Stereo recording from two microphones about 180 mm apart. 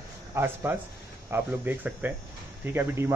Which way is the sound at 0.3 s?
10° right (ahead or behind).